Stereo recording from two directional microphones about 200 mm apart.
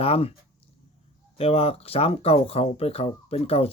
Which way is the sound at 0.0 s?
30° left (ahead or behind).